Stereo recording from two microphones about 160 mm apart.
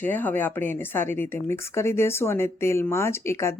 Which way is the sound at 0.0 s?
10° left (ahead or behind).